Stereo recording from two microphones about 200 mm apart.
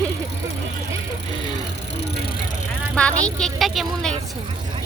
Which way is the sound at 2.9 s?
5° left (ahead or behind).